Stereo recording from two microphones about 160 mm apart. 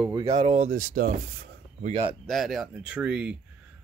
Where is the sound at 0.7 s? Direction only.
60° right (ahead or behind).